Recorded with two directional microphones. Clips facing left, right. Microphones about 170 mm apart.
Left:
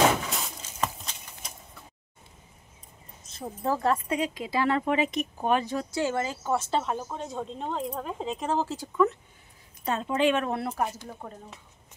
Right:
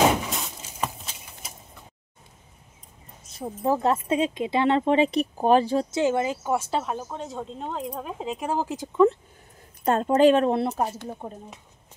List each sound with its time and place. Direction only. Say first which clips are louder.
0.7 s horse: even; 5° right (ahead or behind)
3.3 s speech: right 4 dB; 10° right (ahead or behind)
9.8 s speech: right 7 dB; 45° right (ahead or behind); by 11.6 s 20° right (ahead or behind)